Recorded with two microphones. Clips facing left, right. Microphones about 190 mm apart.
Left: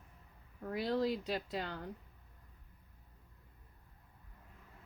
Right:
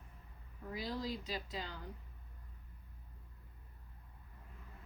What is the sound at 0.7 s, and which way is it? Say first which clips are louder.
Speech: left 7 dB; 60° left (ahead or behind).